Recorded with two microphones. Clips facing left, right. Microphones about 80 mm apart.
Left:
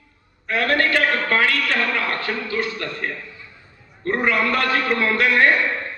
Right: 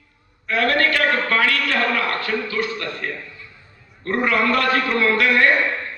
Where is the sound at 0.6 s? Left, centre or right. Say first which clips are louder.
Even; left.